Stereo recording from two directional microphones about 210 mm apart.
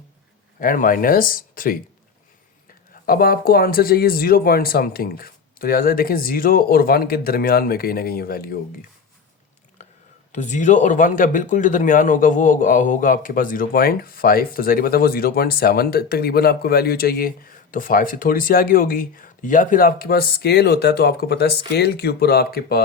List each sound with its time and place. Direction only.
0.6 s speech: 40° left (ahead or behind)
2.9 s speech: 45° left (ahead or behind)
10.3 s speech: 35° left (ahead or behind)